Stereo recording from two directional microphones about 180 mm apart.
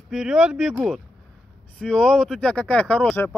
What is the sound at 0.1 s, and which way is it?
Speech, 5° right (ahead or behind).